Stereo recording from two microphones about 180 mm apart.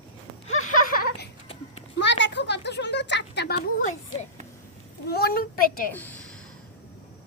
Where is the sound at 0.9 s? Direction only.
60° left (ahead or behind).